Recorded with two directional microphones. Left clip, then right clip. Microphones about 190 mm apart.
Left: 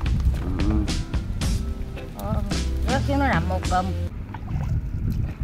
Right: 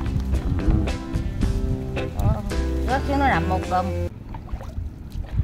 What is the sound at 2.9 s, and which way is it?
Speech, 20° right (ahead or behind).